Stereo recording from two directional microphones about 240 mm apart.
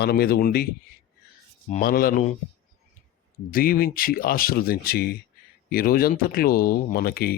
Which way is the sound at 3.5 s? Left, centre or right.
Left.